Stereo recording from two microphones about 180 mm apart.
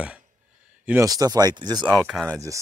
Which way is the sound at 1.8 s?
Centre (ahead or behind).